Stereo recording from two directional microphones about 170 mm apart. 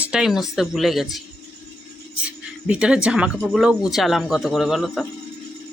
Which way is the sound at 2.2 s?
5° right (ahead or behind).